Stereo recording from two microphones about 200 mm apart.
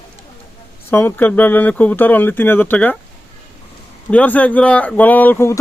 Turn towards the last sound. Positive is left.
turn(degrees=10)  # may be behind; listen again after turning